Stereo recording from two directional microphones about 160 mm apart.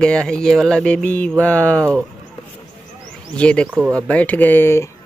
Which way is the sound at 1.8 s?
20° right (ahead or behind).